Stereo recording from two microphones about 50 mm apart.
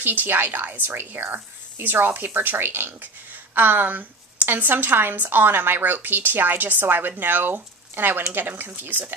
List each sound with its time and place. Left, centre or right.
0.0 s a woman's voice: right